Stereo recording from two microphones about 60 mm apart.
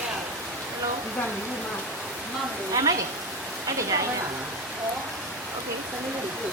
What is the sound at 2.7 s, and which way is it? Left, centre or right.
Speech, right.